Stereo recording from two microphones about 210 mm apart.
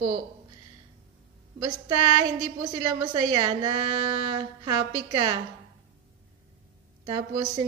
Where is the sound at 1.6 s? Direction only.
20° right (ahead or behind).